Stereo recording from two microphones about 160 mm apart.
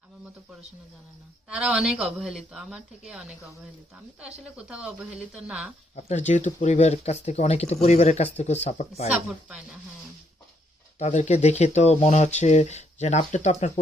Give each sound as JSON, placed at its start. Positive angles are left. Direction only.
{"t": 1.5, "sound": "a woman's voice", "side_deg": -5}
{"t": 6.1, "sound": "speech", "side_deg": 45}
{"t": 9.1, "sound": "speech", "side_deg": -5}
{"t": 10.9, "sound": "speech", "side_deg": 45}